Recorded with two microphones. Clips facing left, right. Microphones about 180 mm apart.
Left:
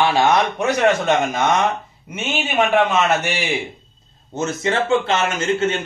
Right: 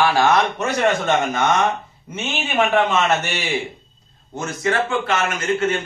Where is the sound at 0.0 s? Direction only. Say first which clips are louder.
Even; 15° left (ahead or behind).